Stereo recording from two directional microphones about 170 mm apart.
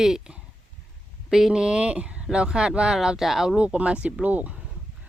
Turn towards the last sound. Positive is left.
turn(degrees=-10)  # may be behind; listen again after turning